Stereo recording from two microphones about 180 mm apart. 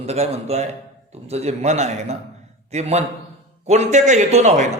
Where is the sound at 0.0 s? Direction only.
35° right (ahead or behind).